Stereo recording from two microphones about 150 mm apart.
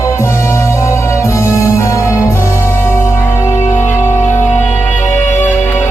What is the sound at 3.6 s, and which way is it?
Music, 50° left (ahead or behind).